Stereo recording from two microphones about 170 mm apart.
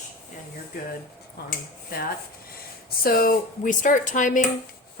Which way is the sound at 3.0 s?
55° left (ahead or behind).